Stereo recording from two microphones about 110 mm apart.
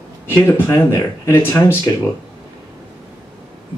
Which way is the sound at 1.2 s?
25° left (ahead or behind).